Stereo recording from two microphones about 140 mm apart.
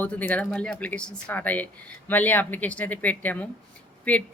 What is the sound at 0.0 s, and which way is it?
A woman's voice, 10° left (ahead or behind).